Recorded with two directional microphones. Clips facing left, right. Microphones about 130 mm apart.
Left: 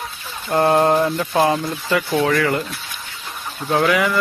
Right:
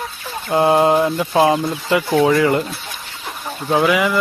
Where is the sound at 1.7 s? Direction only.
25° right (ahead or behind).